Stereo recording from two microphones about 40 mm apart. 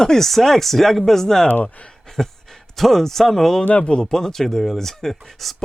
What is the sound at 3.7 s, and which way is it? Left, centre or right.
Speech, left.